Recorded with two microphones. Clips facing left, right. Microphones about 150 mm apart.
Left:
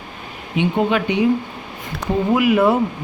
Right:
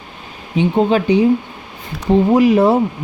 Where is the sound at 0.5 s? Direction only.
35° right (ahead or behind).